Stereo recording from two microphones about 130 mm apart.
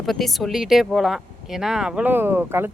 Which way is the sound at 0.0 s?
Centre (ahead or behind).